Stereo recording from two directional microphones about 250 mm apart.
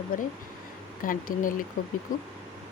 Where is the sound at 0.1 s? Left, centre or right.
Left.